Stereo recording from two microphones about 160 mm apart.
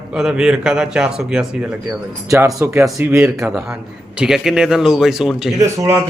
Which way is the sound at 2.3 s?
20° right (ahead or behind).